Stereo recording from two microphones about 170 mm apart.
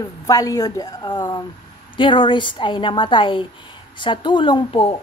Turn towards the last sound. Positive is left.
turn(degrees=30)  # may be behind; listen again after turning